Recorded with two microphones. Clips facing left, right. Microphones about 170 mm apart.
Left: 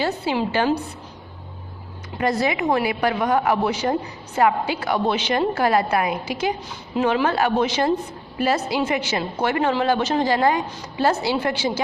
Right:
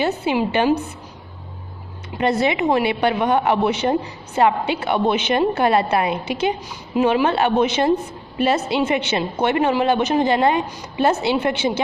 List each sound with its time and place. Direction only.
0.0 s a woman's voice: 20° right (ahead or behind)
2.1 s a woman's voice: 25° right (ahead or behind)
6.9 s a woman's voice: 15° right (ahead or behind)